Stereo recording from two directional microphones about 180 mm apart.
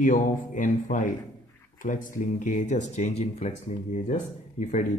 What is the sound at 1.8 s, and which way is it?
Speech, 45° left (ahead or behind).